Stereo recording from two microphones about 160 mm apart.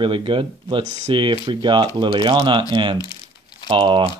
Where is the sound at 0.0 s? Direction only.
30° right (ahead or behind).